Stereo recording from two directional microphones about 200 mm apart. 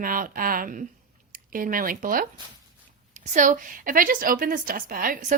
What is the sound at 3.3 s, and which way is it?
A woman's voice, 40° right (ahead or behind).